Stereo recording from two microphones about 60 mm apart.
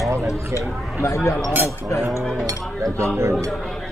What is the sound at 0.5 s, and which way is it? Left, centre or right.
Speech, left.